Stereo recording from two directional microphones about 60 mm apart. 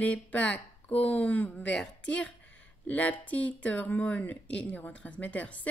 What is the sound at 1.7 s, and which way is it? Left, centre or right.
Speech, centre.